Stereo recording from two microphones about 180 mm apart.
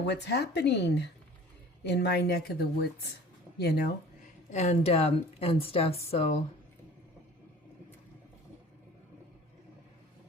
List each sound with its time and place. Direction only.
0.1 s a woman's voice: 70° left (ahead or behind)
4.4 s a woman's voice: 40° left (ahead or behind)